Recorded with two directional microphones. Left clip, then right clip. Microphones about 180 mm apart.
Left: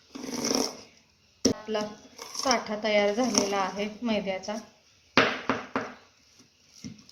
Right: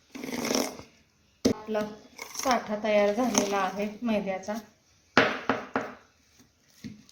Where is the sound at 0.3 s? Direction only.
15° right (ahead or behind).